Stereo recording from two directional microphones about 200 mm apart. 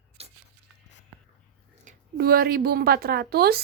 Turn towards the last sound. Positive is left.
turn(degrees=-55)  # may be behind; listen again after turning